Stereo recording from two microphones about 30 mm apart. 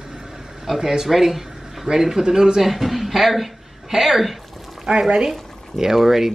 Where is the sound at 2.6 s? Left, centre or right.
Centre.